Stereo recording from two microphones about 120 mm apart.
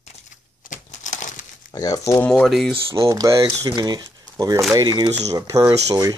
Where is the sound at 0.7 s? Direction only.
80° left.